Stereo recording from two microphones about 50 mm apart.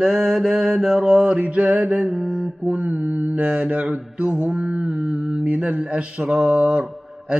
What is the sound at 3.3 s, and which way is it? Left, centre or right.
Mantra, right.